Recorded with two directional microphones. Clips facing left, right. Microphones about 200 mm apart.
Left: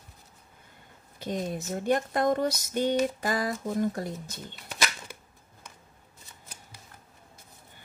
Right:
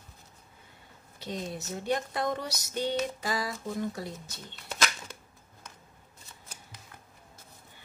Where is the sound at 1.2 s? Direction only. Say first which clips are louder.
Left 5 dB; 55° left (ahead or behind).